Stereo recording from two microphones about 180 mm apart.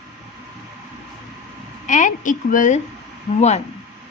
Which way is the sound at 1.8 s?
45° left (ahead or behind).